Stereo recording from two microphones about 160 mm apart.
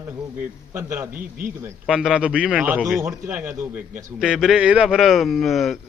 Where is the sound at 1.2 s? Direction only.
60° right (ahead or behind).